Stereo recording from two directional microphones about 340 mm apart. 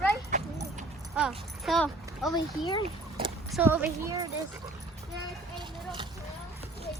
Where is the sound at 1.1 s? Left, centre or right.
Centre.